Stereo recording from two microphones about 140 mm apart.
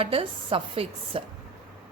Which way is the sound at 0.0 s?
40° right (ahead or behind).